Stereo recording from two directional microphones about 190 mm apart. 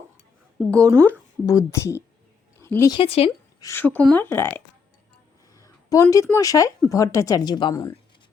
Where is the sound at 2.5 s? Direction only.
15° left (ahead or behind).